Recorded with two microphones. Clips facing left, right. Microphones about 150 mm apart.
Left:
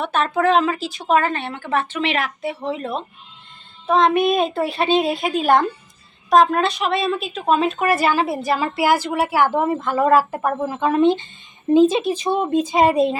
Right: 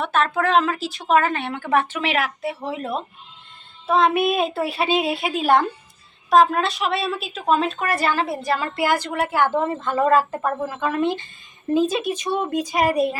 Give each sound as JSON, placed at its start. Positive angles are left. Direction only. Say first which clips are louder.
{"t": 0.0, "sound": "a woman's voice", "louder": "left 2 dB", "side_deg": 0}